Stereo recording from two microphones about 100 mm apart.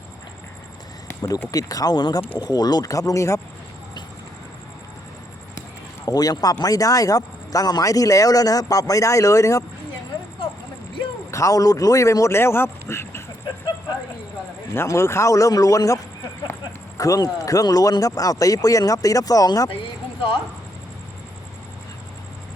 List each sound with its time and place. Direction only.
1.0 s speech: 35° left (ahead or behind)
6.1 s speech: 40° left (ahead or behind)
11.3 s speech: 30° left (ahead or behind)
14.7 s speech: 30° left (ahead or behind)
17.0 s speech: 35° left (ahead or behind)